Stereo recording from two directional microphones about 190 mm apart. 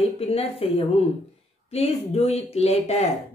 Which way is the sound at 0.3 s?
30° left (ahead or behind).